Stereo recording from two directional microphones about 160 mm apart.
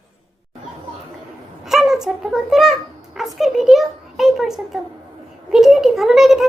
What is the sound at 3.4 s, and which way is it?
A child's voice, centre (ahead or behind).